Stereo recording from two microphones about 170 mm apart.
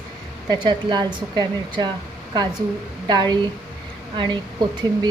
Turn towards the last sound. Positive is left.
turn(degrees=-25)  # may be behind; listen again after turning